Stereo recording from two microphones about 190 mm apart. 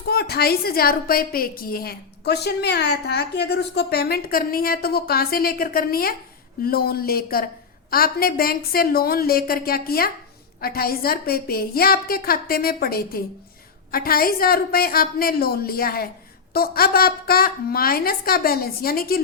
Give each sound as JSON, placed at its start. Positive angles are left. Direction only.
{"t": 0.1, "sound": "a woman's voice", "side_deg": 55}